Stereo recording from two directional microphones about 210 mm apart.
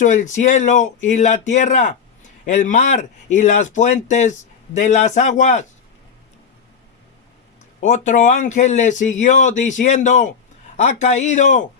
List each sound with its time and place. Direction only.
0.0 s speech: 35° left (ahead or behind)
7.8 s speech: 35° left (ahead or behind)